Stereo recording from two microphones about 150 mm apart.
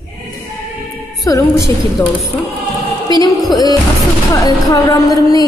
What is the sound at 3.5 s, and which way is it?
Music, 25° left (ahead or behind).